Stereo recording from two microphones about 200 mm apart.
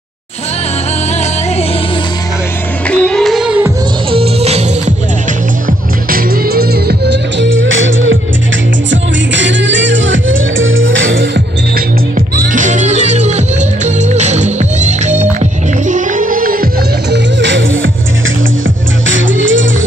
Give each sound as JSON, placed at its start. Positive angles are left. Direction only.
{"t": 2.9, "sound": "music", "side_deg": 5}
{"t": 4.1, "sound": "music", "side_deg": -30}
{"t": 6.0, "sound": "music", "side_deg": -50}
{"t": 12.4, "sound": "music", "side_deg": -40}
{"t": 17.1, "sound": "music", "side_deg": -65}
{"t": 19.0, "sound": "music", "side_deg": -70}